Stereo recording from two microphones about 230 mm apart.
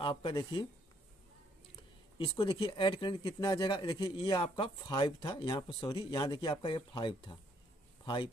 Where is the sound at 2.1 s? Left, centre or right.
Left.